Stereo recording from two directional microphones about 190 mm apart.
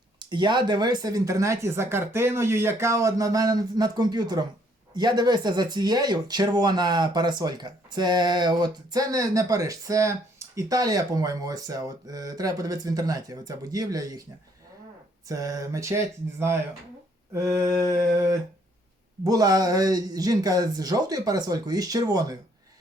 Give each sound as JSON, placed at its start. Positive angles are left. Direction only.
{"t": 0.2, "sound": "speech", "side_deg": -25}
{"t": 15.3, "sound": "speech", "side_deg": -20}